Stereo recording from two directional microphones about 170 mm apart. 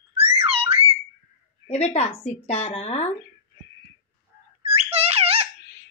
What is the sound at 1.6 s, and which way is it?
A woman's voice, 40° left (ahead or behind).